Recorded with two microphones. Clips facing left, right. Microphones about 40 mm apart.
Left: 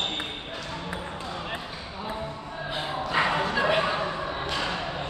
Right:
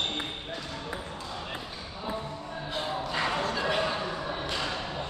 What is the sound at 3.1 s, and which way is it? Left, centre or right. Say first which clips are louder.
Bow-wow: left 7 dB; left.